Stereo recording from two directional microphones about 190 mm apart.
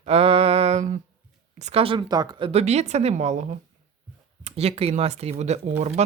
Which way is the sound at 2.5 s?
35° right (ahead or behind).